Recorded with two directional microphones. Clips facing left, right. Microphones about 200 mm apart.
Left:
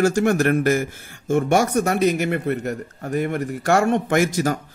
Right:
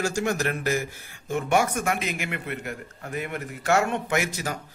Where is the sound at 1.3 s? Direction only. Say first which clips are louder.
Left 6 dB; 45° left (ahead or behind).